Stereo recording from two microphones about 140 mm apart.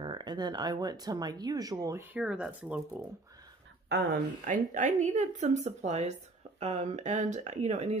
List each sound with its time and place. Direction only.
0.0 s speech: 30° right (ahead or behind)
2.1 s speech: 5° right (ahead or behind)
4.5 s speech: 65° right (ahead or behind)